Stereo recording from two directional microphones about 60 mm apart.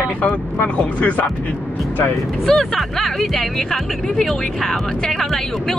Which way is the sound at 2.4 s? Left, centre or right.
Centre.